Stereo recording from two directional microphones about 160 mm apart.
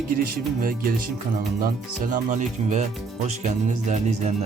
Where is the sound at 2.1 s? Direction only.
50° right (ahead or behind).